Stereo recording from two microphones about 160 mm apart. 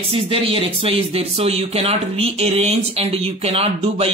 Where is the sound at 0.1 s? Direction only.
35° right (ahead or behind).